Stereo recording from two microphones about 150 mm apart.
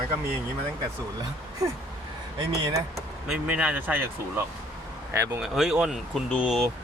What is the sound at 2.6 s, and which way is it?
Speech, 20° right (ahead or behind).